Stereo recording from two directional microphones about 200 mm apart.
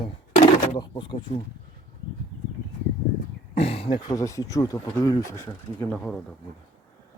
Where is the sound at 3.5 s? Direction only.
30° left (ahead or behind); by 6.2 s 5° left (ahead or behind).